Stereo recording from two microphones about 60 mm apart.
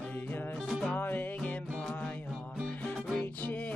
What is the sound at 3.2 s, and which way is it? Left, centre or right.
Music, left.